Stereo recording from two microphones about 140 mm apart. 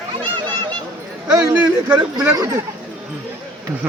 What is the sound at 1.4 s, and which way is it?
Speech, 10° right (ahead or behind).